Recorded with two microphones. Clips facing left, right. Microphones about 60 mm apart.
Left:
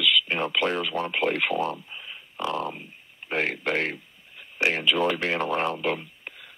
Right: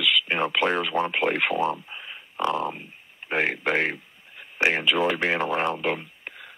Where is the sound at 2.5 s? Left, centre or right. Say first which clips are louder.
Right 3 dB; centre.